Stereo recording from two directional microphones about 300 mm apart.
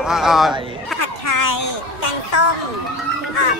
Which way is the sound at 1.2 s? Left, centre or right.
Left.